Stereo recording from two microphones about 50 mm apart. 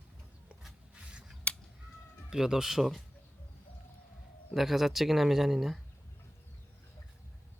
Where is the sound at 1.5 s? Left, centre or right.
Left.